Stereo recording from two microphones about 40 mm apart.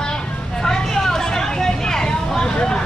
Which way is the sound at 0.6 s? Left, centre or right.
Centre.